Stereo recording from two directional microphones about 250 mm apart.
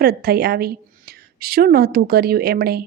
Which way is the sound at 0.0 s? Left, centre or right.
Right.